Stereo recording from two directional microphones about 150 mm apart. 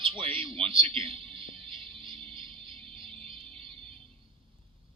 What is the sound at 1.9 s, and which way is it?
Music, 35° right (ahead or behind).